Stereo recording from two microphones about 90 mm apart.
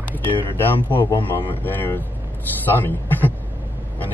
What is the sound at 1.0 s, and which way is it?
A man's voice, 20° left (ahead or behind).